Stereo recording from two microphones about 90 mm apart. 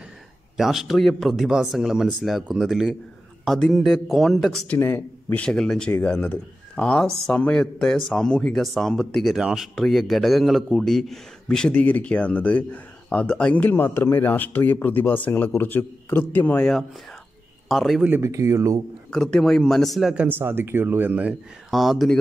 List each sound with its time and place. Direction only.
0.6 s speech: 5° right (ahead or behind)
4.7 s speech: 25° left (ahead or behind)
5.4 s speech: 10° left (ahead or behind)
17.6 s speech: centre (ahead or behind)
18.2 s speech: 35° right (ahead or behind)
19.0 s speech: 5° left (ahead or behind)
20.2 s speech: 25° right (ahead or behind)
21.6 s speech: centre (ahead or behind)